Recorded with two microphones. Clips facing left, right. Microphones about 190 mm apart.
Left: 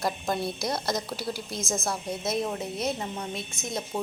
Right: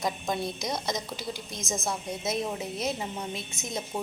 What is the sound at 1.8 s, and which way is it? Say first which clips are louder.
A woman's voice: left 1 dB; centre (ahead or behind).